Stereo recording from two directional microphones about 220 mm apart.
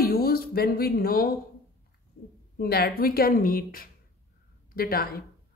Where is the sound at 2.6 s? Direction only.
45° left (ahead or behind).